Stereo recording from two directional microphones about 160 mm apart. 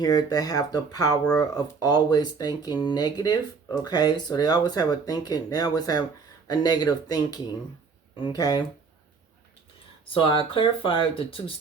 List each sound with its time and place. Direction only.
0.0 s speech: 25° left (ahead or behind)
10.1 s speech: 35° left (ahead or behind)